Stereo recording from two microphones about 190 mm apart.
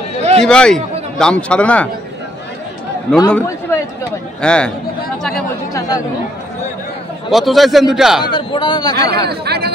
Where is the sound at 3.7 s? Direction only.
10° left (ahead or behind).